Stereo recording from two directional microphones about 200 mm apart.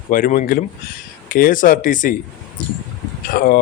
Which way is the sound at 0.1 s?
40° left (ahead or behind).